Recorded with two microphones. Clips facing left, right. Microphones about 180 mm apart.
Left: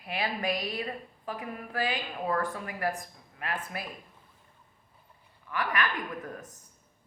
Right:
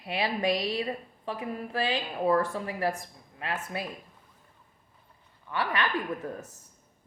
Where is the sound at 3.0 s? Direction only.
25° right (ahead or behind).